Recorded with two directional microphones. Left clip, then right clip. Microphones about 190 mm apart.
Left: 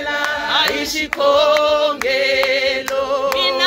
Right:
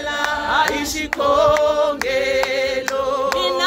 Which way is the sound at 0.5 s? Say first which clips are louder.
Left 1 dB; 30° right (ahead or behind).